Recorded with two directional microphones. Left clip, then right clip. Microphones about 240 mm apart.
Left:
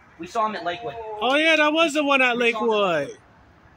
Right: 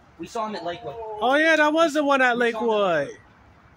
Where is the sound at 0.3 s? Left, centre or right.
Centre.